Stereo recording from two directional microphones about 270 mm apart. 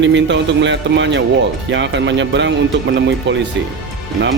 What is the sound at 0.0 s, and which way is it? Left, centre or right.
Speech, right.